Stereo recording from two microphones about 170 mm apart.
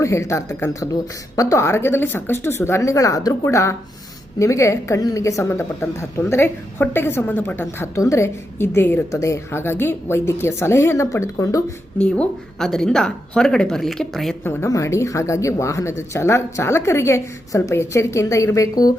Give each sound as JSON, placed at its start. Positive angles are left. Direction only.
{"t": 0.0, "sound": "a woman's voice", "side_deg": 15}
{"t": 11.9, "sound": "a woman's voice", "side_deg": 5}
{"t": 14.4, "sound": "a woman's voice", "side_deg": 15}